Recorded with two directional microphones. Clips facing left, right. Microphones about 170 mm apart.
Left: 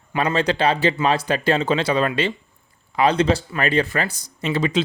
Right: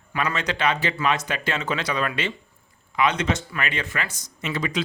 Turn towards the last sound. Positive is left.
turn(degrees=30)  # may be behind; listen again after turning